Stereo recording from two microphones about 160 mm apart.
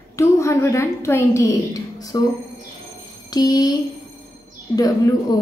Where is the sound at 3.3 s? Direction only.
25° left (ahead or behind).